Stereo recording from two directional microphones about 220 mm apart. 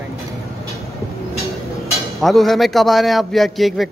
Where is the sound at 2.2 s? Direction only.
Centre (ahead or behind).